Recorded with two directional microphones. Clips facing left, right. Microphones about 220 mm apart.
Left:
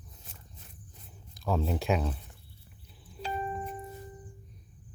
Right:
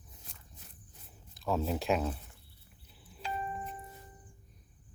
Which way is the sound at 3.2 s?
35° left (ahead or behind).